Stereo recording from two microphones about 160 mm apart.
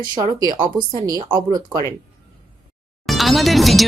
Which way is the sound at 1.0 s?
25° right (ahead or behind).